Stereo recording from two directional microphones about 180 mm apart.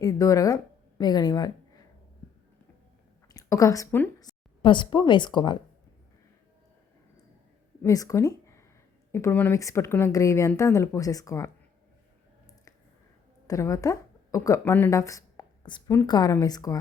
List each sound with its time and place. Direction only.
0.0 s a woman's voice: 20° left (ahead or behind)
3.3 s speech: 20° left (ahead or behind)
7.8 s speech: 20° left (ahead or behind)
13.5 s speech: 15° left (ahead or behind)